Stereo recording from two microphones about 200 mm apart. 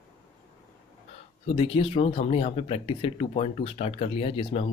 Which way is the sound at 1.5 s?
25° left (ahead or behind).